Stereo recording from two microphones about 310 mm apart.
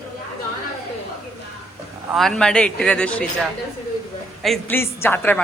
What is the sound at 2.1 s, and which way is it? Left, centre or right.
A woman's voice, centre.